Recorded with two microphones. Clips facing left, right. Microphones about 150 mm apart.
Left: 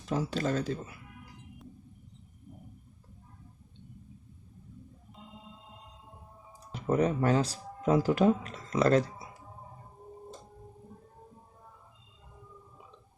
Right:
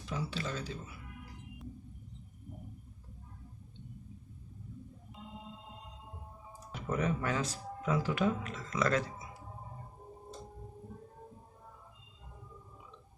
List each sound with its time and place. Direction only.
0.1 s speech: 45° left (ahead or behind)
6.8 s speech: 35° left (ahead or behind)